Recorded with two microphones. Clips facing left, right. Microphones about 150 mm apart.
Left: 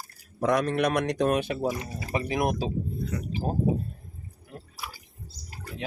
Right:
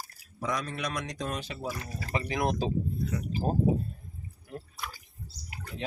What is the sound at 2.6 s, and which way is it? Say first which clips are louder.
Speech: even; 5° left (ahead or behind).